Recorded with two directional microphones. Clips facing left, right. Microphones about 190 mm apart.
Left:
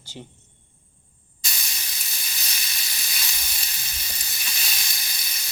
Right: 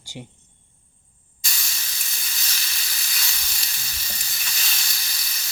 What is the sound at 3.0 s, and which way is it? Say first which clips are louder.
Sizzle: even; 15° left (ahead or behind).